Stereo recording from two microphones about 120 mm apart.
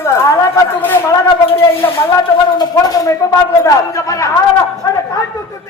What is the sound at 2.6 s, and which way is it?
Speech, 30° left (ahead or behind).